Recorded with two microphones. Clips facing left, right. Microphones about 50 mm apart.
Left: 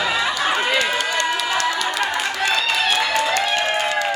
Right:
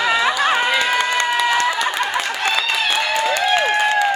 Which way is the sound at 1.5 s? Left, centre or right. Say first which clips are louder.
Right 3 dB; right.